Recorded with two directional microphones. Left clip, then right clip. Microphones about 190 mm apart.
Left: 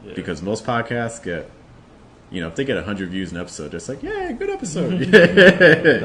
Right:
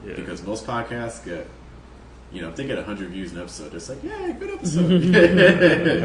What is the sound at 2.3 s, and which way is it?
Speech, 50° left (ahead or behind).